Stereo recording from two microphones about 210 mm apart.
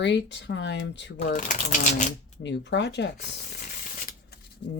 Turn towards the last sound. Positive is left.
turn(degrees=55)  # may be behind; listen again after turning